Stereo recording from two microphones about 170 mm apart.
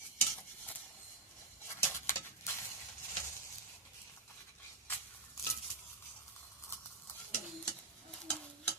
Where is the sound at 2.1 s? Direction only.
15° left (ahead or behind).